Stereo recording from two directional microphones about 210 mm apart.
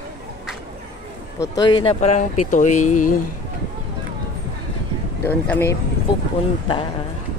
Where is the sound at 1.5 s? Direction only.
20° left (ahead or behind); by 3.1 s 40° left (ahead or behind).